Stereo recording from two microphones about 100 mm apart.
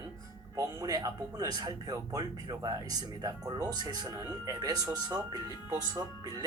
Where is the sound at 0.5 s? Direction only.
35° right (ahead or behind).